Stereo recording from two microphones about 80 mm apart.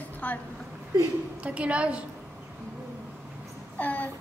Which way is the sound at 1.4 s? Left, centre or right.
Centre.